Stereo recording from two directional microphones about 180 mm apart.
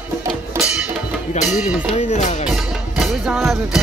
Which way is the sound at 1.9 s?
40° left (ahead or behind).